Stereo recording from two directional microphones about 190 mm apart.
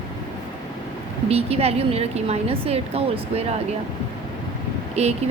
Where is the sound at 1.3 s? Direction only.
30° right (ahead or behind).